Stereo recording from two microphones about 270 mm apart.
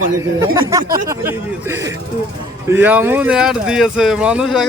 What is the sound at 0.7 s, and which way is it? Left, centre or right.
Speech, centre.